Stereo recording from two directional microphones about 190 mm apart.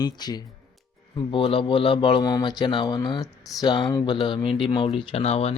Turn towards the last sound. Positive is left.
turn(degrees=30)  # may be behind; listen again after turning